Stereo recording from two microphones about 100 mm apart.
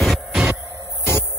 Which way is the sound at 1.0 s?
25° left (ahead or behind).